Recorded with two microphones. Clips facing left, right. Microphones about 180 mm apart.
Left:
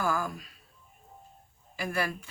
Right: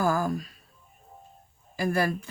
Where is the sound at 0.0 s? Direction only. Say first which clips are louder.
Right 5 dB; 40° right (ahead or behind).